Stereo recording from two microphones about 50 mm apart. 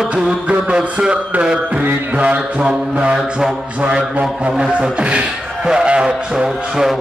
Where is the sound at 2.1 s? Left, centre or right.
Right.